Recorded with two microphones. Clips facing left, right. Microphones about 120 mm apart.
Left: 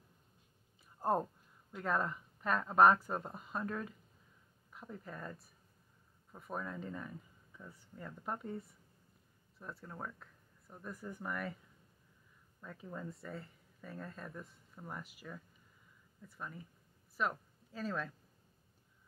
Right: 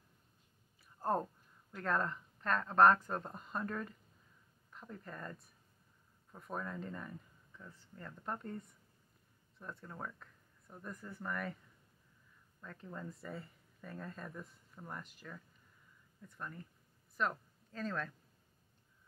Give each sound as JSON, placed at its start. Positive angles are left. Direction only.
{"t": 1.0, "sound": "a sound", "side_deg": 15}
{"t": 1.7, "sound": "speech", "side_deg": 10}
{"t": 11.1, "sound": "speech", "side_deg": 15}
{"t": 11.3, "sound": "speech", "side_deg": 5}
{"t": 12.6, "sound": "speech", "side_deg": 5}